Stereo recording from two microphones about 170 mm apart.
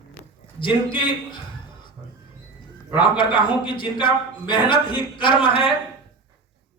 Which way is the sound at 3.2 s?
30° left (ahead or behind).